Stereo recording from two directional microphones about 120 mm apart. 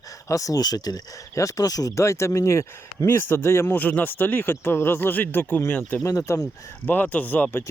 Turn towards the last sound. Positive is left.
turn(degrees=15)  # may be behind; listen again after turning